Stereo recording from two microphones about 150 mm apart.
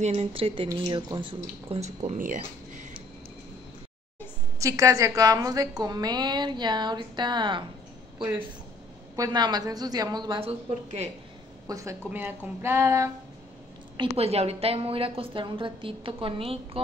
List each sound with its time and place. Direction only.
0.0 s a woman's voice: 45° right (ahead or behind)
2.0 s speech: 60° right (ahead or behind)
4.6 s a woman's voice: 20° right (ahead or behind)
9.1 s a woman's voice: 25° right (ahead or behind)
10.4 s speech: 45° right (ahead or behind)
11.6 s a woman's voice: 20° right (ahead or behind)
14.1 s a woman's voice: 45° right (ahead or behind)